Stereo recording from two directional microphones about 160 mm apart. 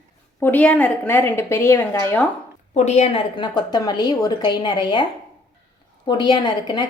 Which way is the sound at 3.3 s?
25° left (ahead or behind).